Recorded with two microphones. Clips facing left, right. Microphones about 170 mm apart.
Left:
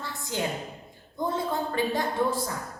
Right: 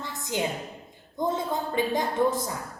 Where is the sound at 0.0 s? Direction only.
20° right (ahead or behind).